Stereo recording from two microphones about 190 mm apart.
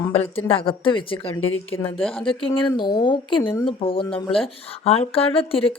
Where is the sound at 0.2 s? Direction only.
30° left (ahead or behind).